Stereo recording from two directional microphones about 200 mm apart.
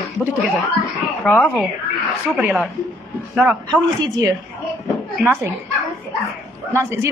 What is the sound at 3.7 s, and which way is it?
Speech, 20° right (ahead or behind).